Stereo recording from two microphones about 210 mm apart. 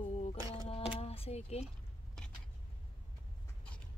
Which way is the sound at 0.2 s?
25° left (ahead or behind).